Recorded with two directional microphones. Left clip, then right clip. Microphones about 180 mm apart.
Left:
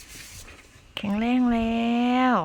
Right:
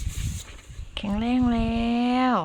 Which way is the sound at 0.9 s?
5° left (ahead or behind).